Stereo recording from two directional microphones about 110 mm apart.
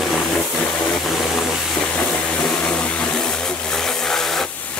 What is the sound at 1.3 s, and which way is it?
Water, centre (ahead or behind).